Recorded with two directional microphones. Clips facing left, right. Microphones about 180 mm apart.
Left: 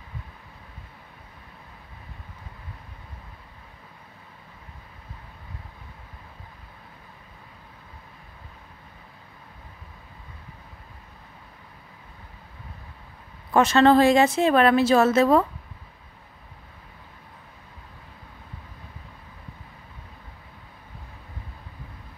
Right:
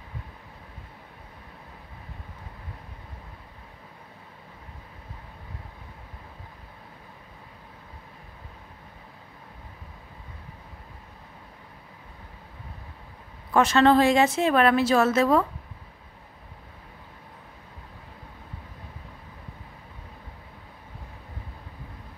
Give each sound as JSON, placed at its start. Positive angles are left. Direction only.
{"t": 13.5, "sound": "speech", "side_deg": 25}
{"t": 13.8, "sound": "a woman's voice", "side_deg": 35}